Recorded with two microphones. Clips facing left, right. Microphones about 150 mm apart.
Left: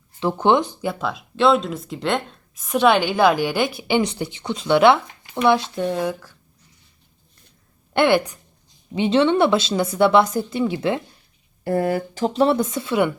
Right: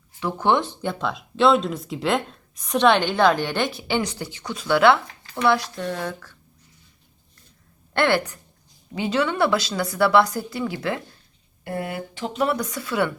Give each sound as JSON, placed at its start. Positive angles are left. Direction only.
{"t": 0.2, "sound": "a woman's voice", "side_deg": 25}
{"t": 0.8, "sound": "speech", "side_deg": 5}
{"t": 6.0, "sound": "speech", "side_deg": 10}
{"t": 7.9, "sound": "a woman's voice", "side_deg": 15}
{"t": 11.6, "sound": "speech", "side_deg": 35}